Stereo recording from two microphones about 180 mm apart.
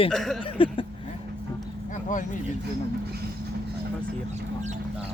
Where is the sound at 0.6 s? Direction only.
30° left (ahead or behind).